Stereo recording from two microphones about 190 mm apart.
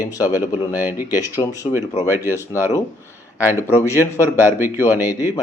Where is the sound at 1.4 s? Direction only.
20° left (ahead or behind).